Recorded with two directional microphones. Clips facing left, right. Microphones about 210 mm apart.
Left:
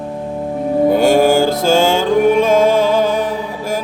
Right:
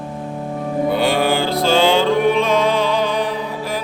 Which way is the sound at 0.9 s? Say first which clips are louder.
Left 6 dB; 45° left (ahead or behind).